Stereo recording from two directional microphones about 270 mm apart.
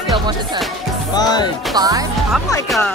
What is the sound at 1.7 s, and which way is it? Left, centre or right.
Speech, centre.